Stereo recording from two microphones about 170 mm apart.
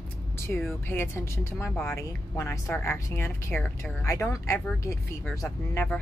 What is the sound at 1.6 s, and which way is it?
Speech, centre (ahead or behind).